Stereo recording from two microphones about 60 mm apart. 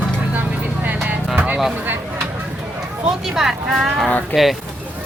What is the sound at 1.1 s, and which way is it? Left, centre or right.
Music, right.